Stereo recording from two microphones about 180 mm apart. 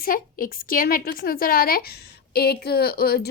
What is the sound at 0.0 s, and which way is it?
A woman's voice, 50° left (ahead or behind).